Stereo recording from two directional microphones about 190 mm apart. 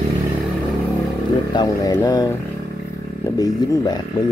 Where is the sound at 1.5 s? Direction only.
20° left (ahead or behind).